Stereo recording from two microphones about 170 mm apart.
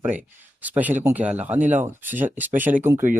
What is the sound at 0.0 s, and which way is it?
Speech, 10° right (ahead or behind).